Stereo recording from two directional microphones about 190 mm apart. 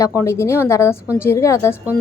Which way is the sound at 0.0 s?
15° left (ahead or behind).